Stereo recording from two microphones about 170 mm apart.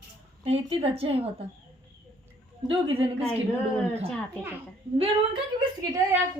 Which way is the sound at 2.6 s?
35° right (ahead or behind).